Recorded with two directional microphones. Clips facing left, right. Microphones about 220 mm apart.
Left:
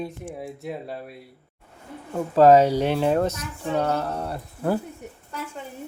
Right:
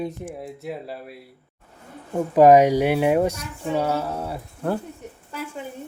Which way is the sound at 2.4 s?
15° right (ahead or behind).